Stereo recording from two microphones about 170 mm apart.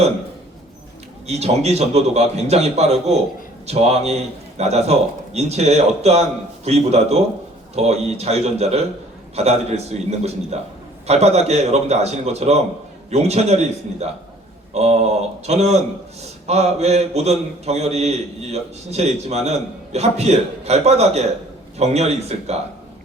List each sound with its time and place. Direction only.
1.3 s a man's voice: 40° right (ahead or behind)